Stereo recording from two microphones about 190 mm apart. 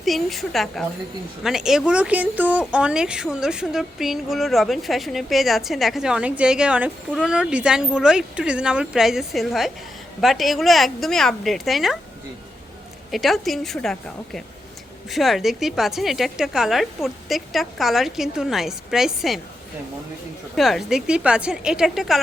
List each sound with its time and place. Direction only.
0.0 s speech: centre (ahead or behind)
13.1 s speech: centre (ahead or behind)
20.6 s speech: centre (ahead or behind)